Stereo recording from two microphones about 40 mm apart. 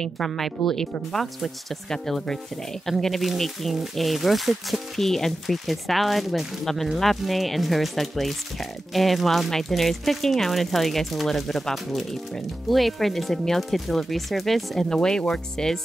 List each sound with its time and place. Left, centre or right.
0.0 s speech: centre
14.9 s speech: centre